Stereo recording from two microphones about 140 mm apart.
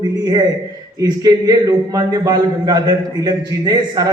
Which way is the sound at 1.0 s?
30° right (ahead or behind).